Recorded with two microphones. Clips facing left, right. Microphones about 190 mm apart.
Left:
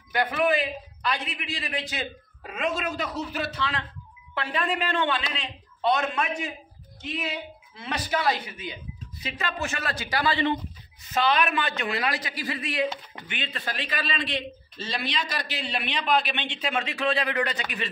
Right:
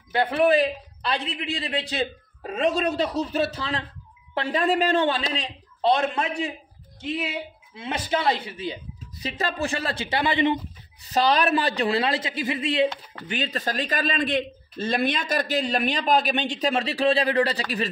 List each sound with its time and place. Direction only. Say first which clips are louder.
0.1 s a man's voice: right 4 dB; 30° right (ahead or behind)
7.7 s speech: right 2 dB; 25° right (ahead or behind)
11.1 s a man's voice: right 3 dB; 35° right (ahead or behind)
13.3 s a man's voice: right 7 dB; 40° right (ahead or behind)